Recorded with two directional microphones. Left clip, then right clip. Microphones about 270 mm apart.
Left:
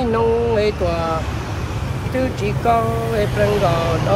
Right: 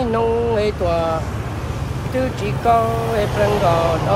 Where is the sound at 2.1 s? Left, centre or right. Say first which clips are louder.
Even; centre.